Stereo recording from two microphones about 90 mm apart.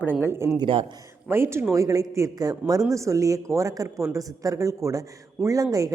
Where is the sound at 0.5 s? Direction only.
70° right (ahead or behind).